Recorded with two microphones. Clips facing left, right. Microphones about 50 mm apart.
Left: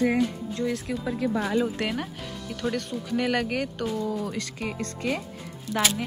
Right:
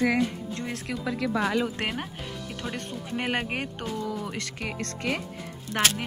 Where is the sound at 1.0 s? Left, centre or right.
Right.